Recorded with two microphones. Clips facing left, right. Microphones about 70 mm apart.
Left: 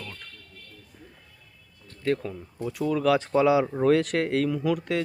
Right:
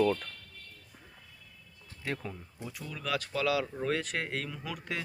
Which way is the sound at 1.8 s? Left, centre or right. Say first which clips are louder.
Left 10 dB; centre.